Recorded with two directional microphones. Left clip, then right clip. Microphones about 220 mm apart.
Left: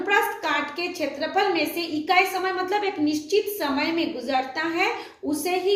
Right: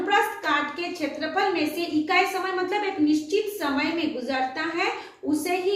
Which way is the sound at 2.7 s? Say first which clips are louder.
Even; 50° left (ahead or behind).